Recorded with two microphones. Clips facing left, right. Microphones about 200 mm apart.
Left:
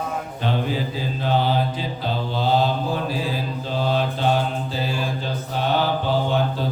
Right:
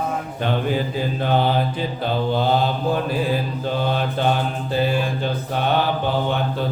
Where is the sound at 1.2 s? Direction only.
60° right (ahead or behind).